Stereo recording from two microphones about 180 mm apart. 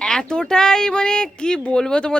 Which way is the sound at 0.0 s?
5° left (ahead or behind).